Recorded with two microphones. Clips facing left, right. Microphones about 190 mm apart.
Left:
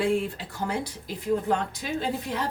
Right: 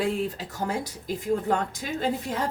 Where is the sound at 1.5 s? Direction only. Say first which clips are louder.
Even; 50° right (ahead or behind).